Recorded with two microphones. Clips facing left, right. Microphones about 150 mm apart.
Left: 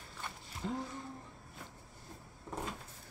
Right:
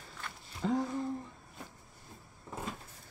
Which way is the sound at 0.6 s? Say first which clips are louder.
Right 8 dB; 90° right.